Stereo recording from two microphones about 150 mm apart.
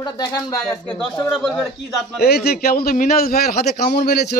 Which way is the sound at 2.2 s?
90° left.